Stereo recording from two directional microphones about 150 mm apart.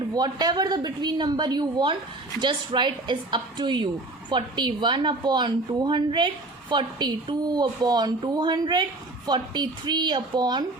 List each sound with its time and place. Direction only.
0.1 s a woman's voice: 25° right (ahead or behind)